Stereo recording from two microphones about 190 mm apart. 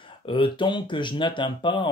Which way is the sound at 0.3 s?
25° left (ahead or behind).